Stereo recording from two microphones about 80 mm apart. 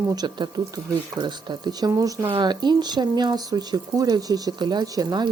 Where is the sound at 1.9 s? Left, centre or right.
Right.